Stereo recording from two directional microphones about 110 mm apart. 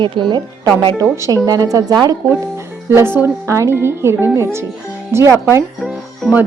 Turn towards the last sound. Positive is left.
turn(degrees=0)  # may be behind; listen again after turning